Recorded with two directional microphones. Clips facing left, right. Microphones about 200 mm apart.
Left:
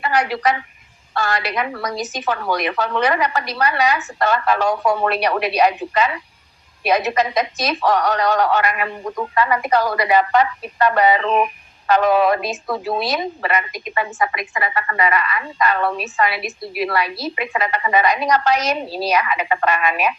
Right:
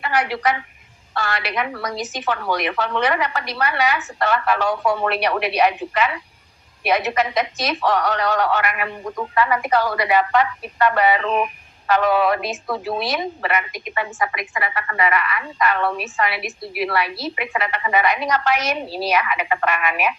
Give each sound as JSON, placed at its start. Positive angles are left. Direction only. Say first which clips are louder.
{"t": 0.0, "sound": "a woman's voice", "louder": "left 2 dB", "side_deg": 40}